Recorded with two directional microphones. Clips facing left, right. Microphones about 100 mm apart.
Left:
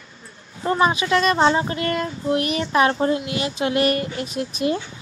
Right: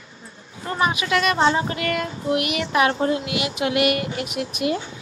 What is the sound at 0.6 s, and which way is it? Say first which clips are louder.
A child's voice: left 4 dB; 30° left (ahead or behind).